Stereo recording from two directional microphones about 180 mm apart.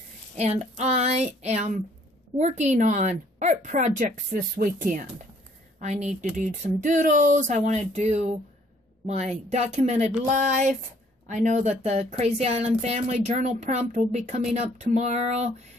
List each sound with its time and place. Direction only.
0.4 s a woman's voice: 35° right (ahead or behind)